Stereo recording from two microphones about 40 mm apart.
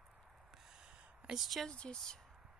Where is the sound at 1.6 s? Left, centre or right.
Left.